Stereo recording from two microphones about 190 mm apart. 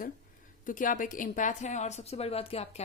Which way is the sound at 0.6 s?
45° left (ahead or behind).